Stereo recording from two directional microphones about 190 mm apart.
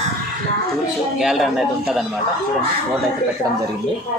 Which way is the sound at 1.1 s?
Centre (ahead or behind).